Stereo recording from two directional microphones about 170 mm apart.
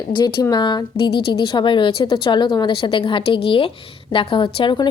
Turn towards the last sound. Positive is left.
turn(degrees=30)  # may be behind; listen again after turning